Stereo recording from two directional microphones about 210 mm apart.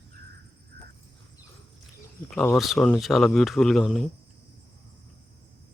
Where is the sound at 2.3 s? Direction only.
5° left (ahead or behind).